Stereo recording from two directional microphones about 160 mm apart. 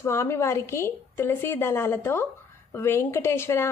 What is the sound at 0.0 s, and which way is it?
Speech, 15° left (ahead or behind).